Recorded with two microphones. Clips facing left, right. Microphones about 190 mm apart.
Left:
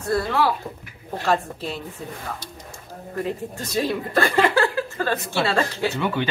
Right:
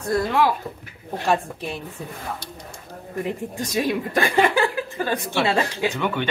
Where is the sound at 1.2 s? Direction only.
15° right (ahead or behind).